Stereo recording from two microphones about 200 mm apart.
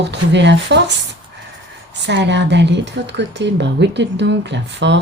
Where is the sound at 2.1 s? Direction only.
60° right (ahead or behind).